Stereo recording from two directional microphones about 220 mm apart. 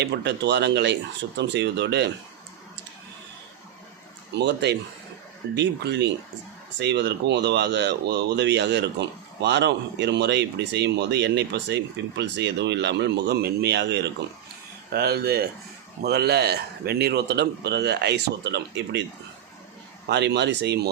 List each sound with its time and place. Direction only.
0.0 s speech: 50° right (ahead or behind)
4.4 s speech: 50° right (ahead or behind)
20.1 s speech: 50° right (ahead or behind)